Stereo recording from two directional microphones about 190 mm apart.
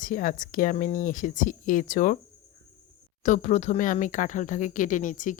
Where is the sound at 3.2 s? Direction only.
40° left (ahead or behind).